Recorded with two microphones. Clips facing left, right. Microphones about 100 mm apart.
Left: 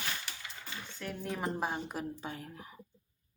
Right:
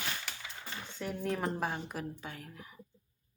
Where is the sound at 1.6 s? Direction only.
20° left (ahead or behind).